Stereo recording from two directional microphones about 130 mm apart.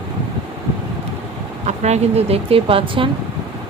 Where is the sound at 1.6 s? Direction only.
60° right (ahead or behind).